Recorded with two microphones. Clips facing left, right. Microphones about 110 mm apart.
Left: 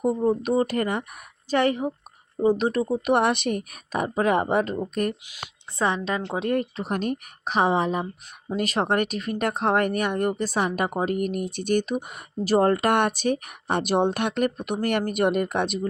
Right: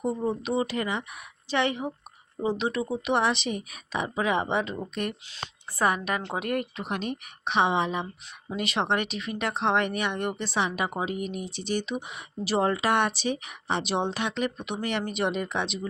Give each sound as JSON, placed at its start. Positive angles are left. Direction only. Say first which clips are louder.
{"t": 0.3, "sound": "speech", "louder": "left 6 dB", "side_deg": 45}
{"t": 5.2, "sound": "speech", "louder": "even", "side_deg": 15}
{"t": 5.8, "sound": "a woman's voice", "louder": "left 1 dB", "side_deg": 25}